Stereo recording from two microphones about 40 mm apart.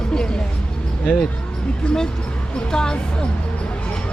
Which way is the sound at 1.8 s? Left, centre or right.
Centre.